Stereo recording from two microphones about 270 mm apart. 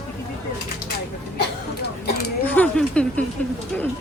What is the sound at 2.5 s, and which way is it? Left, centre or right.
Speech, centre.